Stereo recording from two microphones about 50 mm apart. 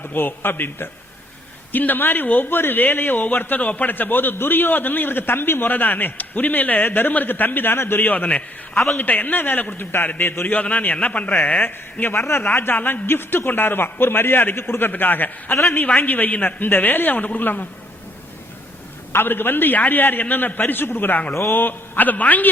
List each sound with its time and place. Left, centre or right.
0.0 s a man's voice: left
9.9 s a man's voice: left
10.4 s a man's voice: left
13.1 s a man's voice: left
19.1 s a man's voice: left